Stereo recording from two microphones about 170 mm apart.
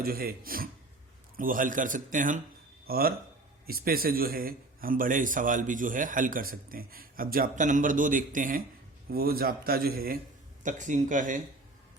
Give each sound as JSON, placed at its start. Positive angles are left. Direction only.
{"t": 0.0, "sound": "a man's voice", "side_deg": -60}
{"t": 2.8, "sound": "a man's voice", "side_deg": -60}
{"t": 9.0, "sound": "a man's voice", "side_deg": -65}
{"t": 10.6, "sound": "a man's voice", "side_deg": -45}